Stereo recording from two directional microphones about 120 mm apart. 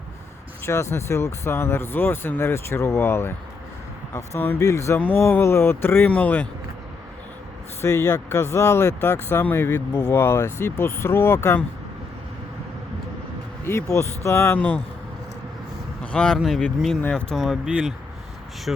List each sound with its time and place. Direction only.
0.6 s speech: 20° left (ahead or behind)
7.8 s speech: 25° left (ahead or behind)
13.7 s speech: 25° left (ahead or behind)
16.1 s speech: 10° left (ahead or behind)
17.3 s speech: centre (ahead or behind)